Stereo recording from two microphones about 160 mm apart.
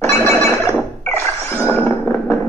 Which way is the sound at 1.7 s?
10° left (ahead or behind).